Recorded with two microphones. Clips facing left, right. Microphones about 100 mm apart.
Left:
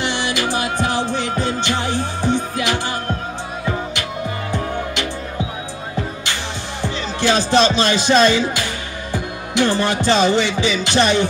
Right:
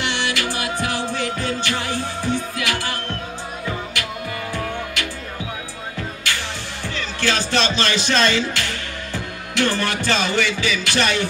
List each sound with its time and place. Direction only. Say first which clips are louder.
0.0 s music: left 3 dB; 20° left (ahead or behind)
4.5 s music: left 3 dB; 20° left (ahead or behind)
6.8 s speech: left 5 dB; 20° left (ahead or behind)